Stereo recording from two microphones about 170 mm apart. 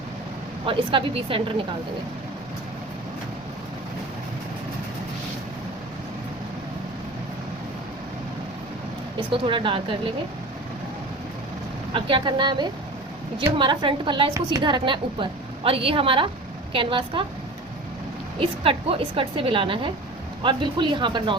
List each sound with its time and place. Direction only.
0.6 s a woman's voice: 30° right (ahead or behind)
9.3 s a woman's voice: 30° right (ahead or behind)
11.9 s a woman's voice: 30° right (ahead or behind)
18.3 s a woman's voice: 35° right (ahead or behind)